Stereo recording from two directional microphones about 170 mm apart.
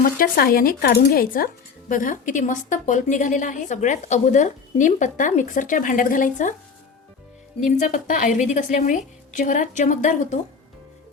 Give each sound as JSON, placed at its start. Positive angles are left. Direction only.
{"t": 0.0, "sound": "a woman's voice", "side_deg": 60}
{"t": 7.6, "sound": "a woman's voice", "side_deg": 50}